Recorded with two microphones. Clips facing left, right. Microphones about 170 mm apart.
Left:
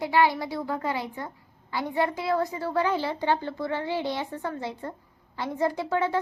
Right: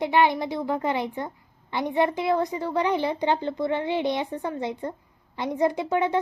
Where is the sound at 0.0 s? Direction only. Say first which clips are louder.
Right 2 dB; 20° right (ahead or behind).